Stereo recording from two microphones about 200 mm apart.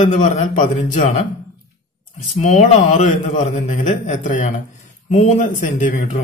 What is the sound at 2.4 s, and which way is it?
Speech, 35° left (ahead or behind).